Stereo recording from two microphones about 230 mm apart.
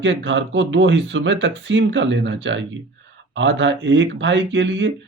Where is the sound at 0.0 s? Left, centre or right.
Right.